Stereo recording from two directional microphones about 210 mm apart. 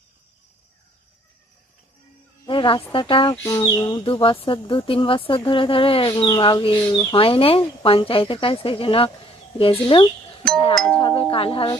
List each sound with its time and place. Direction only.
2.5 s speech: 25° left (ahead or behind)
3.3 s speech: 10° left (ahead or behind)
3.6 s speech: 20° left (ahead or behind)
10.8 s speech: 5° left (ahead or behind)
11.0 s speech: 25° left (ahead or behind)